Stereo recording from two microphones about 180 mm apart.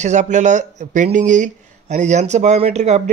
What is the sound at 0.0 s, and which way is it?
Speech, 40° right (ahead or behind).